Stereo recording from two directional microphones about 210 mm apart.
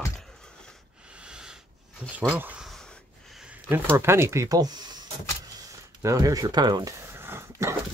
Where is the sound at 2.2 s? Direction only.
5° right (ahead or behind).